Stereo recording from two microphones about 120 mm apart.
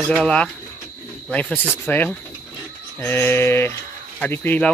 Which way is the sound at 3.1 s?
20° left (ahead or behind).